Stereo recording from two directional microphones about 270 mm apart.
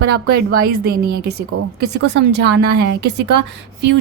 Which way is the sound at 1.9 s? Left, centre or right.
Right.